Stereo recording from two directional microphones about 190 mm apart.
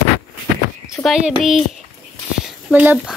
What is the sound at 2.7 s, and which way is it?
Speech, 5° right (ahead or behind).